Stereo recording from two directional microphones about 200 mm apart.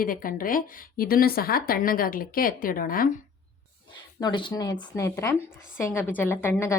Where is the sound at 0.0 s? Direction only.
45° left (ahead or behind).